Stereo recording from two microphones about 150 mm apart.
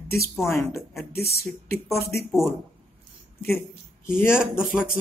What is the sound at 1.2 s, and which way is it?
Speech, 90° left.